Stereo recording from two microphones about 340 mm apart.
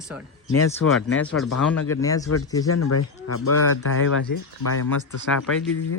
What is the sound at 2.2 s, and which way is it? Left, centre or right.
Speech, left.